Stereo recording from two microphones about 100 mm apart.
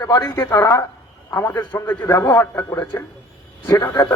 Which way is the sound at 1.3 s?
20° left (ahead or behind).